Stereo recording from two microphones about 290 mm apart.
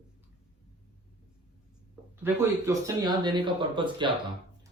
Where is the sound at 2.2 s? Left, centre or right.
Centre.